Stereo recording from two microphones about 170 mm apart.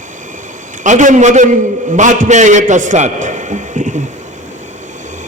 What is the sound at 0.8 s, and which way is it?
A man's voice, 45° right (ahead or behind).